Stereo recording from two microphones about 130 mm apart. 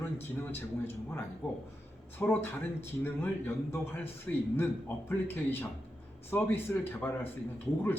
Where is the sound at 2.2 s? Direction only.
15° left (ahead or behind).